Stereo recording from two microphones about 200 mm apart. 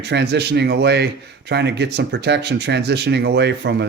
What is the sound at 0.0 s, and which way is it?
Speech, 55° right (ahead or behind).